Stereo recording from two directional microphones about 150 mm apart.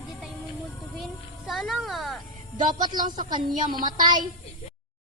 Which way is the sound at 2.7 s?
30° right (ahead or behind).